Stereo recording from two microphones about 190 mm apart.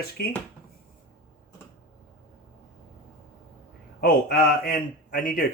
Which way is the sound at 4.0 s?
50° left (ahead or behind).